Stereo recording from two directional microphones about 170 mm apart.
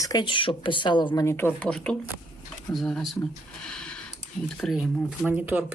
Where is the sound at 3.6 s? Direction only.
5° left (ahead or behind).